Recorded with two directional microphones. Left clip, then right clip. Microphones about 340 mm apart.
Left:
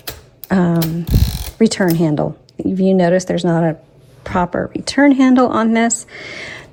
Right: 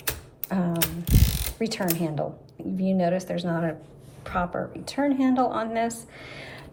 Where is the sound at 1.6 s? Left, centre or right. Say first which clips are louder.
Left 14 dB; left.